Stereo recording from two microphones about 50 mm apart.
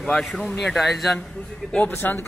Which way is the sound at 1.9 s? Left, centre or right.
Left.